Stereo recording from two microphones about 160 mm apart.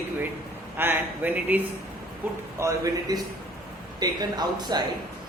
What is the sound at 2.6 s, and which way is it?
Speech, 20° right (ahead or behind).